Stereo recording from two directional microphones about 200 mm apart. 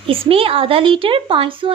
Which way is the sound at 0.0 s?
30° right (ahead or behind).